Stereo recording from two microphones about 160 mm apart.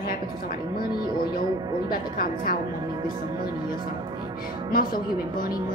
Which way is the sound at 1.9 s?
65° left (ahead or behind).